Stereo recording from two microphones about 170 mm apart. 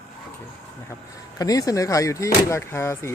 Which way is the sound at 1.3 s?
20° left (ahead or behind).